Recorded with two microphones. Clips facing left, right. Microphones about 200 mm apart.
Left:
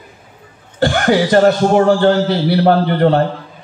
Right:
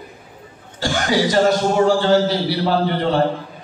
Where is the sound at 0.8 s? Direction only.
60° left (ahead or behind).